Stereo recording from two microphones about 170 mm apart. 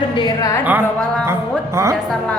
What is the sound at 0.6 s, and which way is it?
A man's voice, 10° right (ahead or behind).